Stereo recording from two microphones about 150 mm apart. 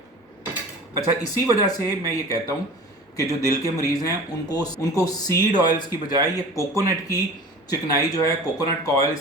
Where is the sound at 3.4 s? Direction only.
20° left (ahead or behind).